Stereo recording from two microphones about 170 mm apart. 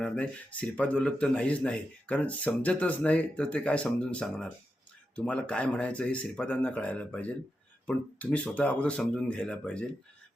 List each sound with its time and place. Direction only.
0.0 s speech: 5° left (ahead or behind)